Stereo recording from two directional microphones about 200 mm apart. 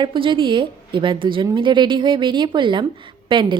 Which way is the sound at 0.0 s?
25° right (ahead or behind).